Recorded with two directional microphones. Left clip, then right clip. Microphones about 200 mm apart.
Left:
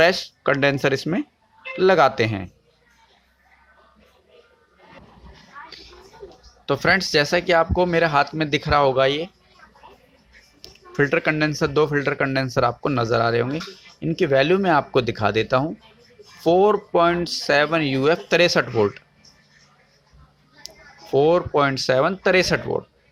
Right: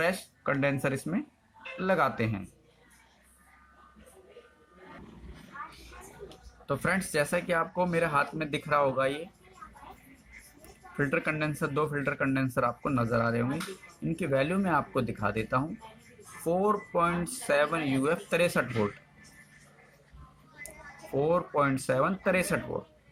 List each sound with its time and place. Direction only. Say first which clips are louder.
0.0 s speech: left 12 dB; 45° left (ahead or behind)
6.7 s speech: left 11 dB; 50° left (ahead or behind)
10.9 s speech: left 10 dB; 50° left (ahead or behind)
21.2 s speech: left 9 dB; 50° left (ahead or behind)